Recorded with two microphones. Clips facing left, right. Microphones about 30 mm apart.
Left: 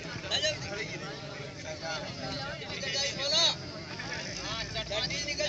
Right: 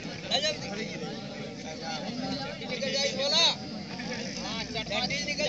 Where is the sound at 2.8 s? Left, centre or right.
Right.